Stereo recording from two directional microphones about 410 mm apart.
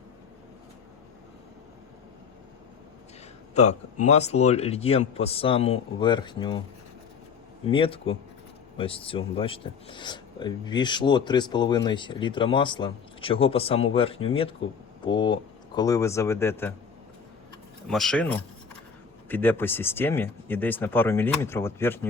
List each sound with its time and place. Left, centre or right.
3.5 s a man's voice: centre
7.6 s speech: centre
17.8 s speech: centre